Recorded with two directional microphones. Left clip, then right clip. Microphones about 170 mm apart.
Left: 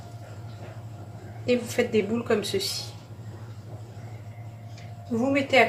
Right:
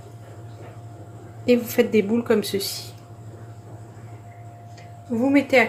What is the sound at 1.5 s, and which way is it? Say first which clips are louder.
Speech: right 5 dB; 45° right (ahead or behind).